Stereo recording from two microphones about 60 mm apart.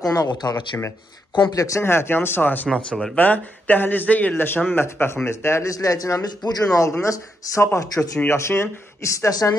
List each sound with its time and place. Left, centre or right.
0.0 s speech: left
1.5 s speech: left
1.8 s speech: left
2.7 s speech: centre
3.2 s speech: left
5.0 s speech: left
5.7 s speech: left